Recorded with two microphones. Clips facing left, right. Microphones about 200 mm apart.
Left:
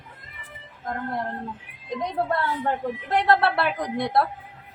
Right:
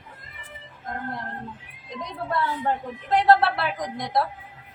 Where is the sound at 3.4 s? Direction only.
60° left (ahead or behind).